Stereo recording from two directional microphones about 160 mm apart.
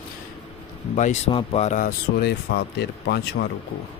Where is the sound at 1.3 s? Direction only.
40° left (ahead or behind).